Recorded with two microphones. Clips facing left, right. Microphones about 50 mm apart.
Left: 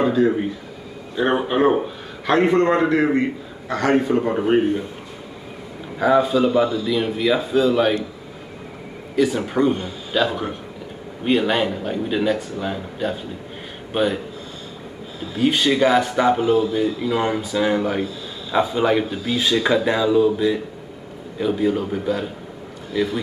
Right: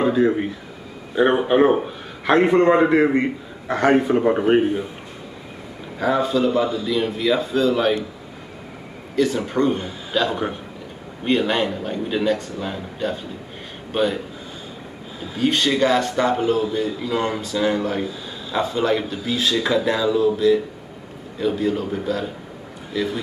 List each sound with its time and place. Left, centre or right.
0.1 s a man's voice: centre
5.9 s speech: centre
9.1 s a man's voice: centre
15.3 s speech: centre